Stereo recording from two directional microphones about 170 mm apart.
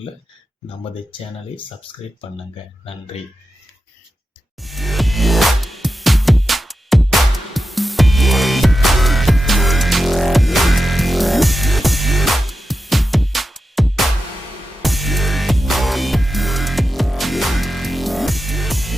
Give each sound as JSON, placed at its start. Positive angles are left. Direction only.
{"t": 1.9, "sound": "speech", "side_deg": 30}
{"t": 4.6, "sound": "music", "side_deg": 0}